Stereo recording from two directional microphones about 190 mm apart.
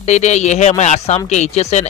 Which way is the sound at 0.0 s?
35° left (ahead or behind).